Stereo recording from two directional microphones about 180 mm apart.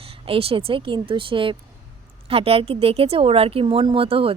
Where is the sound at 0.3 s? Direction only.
30° right (ahead or behind).